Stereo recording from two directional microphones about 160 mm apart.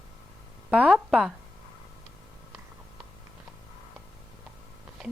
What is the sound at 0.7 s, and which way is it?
Speech, 5° right (ahead or behind).